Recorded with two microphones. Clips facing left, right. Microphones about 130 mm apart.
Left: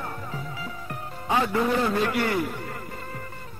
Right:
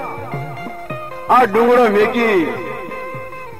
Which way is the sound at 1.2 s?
65° right (ahead or behind).